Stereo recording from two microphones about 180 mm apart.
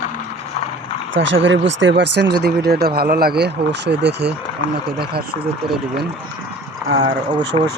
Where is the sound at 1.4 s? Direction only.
90° right; by 4.3 s 70° right (ahead or behind).